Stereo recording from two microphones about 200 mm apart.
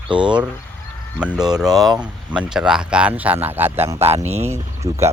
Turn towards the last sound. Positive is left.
turn(degrees=-15)  # may be behind; listen again after turning